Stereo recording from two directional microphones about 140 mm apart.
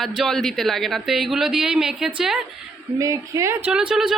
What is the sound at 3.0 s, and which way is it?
Speech, 25° right (ahead or behind).